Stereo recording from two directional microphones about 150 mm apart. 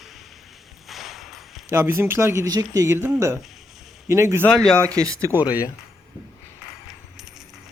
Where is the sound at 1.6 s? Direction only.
20° right (ahead or behind).